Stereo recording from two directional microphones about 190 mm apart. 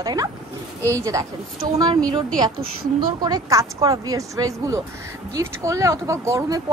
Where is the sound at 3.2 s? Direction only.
20° right (ahead or behind).